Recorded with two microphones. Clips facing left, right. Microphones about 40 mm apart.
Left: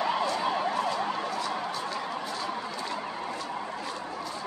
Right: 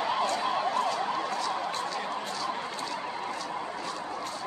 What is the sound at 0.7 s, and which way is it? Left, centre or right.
Emergency vehicle, centre.